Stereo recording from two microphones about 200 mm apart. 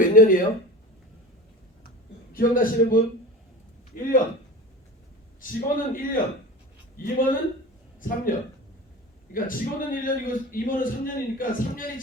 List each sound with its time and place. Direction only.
0.0 s speech: 45° left (ahead or behind)
2.3 s a man's voice: 45° left (ahead or behind)
5.4 s a man's voice: 45° left (ahead or behind)